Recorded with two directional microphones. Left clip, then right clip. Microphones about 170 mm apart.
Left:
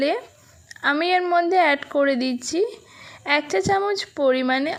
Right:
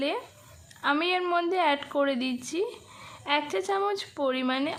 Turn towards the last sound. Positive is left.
turn(degrees=30)  # may be behind; listen again after turning